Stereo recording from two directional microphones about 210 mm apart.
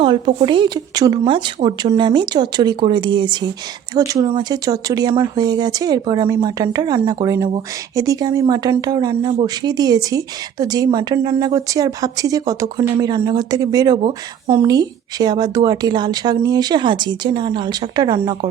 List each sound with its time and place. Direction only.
0.3 s speech: 25° right (ahead or behind)